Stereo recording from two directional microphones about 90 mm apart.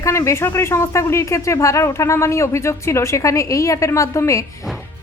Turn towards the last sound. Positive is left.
turn(degrees=35)  # may be behind; listen again after turning